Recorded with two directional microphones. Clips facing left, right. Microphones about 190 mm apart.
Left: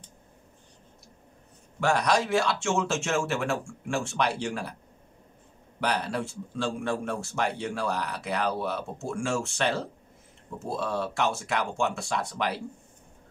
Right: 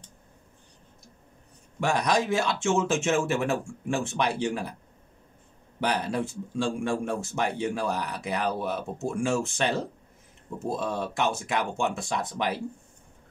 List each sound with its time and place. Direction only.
1.8 s a man's voice: 15° right (ahead or behind)
5.8 s a man's voice: 15° right (ahead or behind)
10.7 s a man's voice: 15° right (ahead or behind)